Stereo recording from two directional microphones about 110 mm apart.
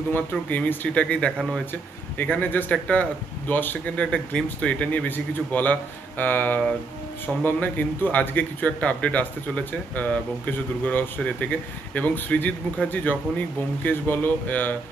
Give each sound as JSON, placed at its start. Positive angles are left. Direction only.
{"t": 0.1, "sound": "speech", "side_deg": 15}